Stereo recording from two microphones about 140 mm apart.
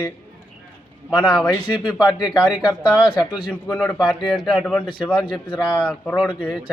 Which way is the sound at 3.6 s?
5° left (ahead or behind).